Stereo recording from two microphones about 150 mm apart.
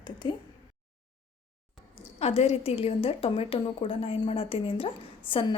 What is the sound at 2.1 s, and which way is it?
A woman's voice, 45° left (ahead or behind).